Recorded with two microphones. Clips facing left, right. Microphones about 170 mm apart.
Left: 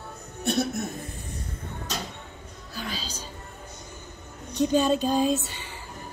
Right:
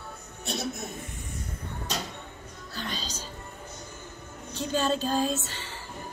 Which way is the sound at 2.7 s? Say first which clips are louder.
Left 1 dB; 10° left (ahead or behind).